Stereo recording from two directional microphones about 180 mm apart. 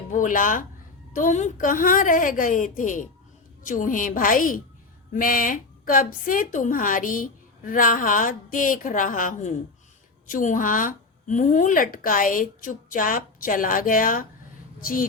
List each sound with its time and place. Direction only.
0.1 s a woman's voice: 50° left (ahead or behind)